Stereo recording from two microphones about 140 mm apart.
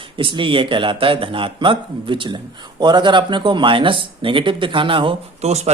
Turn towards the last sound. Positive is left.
turn(degrees=-50)  # may be behind; listen again after turning